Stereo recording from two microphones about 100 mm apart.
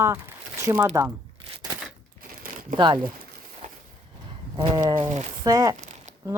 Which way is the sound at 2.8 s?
50° right (ahead or behind).